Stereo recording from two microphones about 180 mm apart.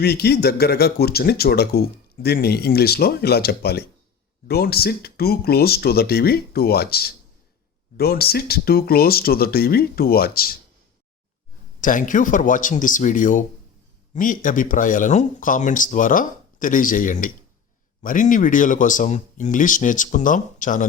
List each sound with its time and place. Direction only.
0.0 s speech: 60° left (ahead or behind)
11.8 s speech: 45° left (ahead or behind)